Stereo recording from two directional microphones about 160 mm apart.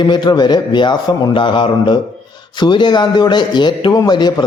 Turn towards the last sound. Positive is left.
turn(degrees=25)  # may be behind; listen again after turning